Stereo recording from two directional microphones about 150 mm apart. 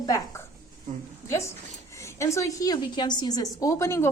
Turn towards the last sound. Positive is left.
turn(degrees=20)  # may be behind; listen again after turning